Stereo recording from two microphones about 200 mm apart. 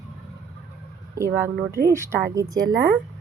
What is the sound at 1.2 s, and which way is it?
Speech, 15° right (ahead or behind).